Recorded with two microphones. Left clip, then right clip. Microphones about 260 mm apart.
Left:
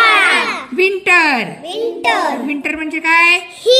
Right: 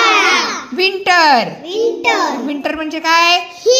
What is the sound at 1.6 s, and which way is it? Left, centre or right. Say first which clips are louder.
Speech: right 2 dB; left.